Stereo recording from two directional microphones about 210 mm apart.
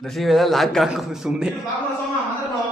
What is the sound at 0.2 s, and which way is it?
A man's voice, centre (ahead or behind).